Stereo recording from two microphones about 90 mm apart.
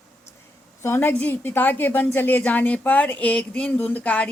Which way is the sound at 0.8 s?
25° left (ahead or behind).